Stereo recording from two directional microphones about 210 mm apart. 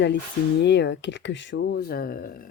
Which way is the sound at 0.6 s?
55° left (ahead or behind).